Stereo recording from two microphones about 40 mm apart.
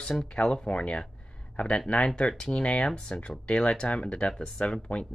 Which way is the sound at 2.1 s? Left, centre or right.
Left.